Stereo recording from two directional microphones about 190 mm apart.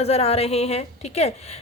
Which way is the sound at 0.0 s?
35° left (ahead or behind).